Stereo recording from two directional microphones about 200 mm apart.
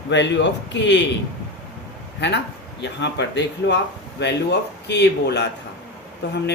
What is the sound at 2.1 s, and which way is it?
A man's voice, 60° left (ahead or behind).